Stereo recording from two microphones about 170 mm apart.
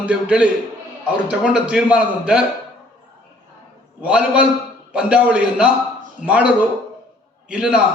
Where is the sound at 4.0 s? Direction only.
5° right (ahead or behind).